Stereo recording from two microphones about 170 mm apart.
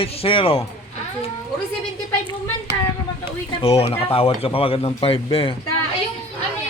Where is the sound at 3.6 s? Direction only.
35° left (ahead or behind).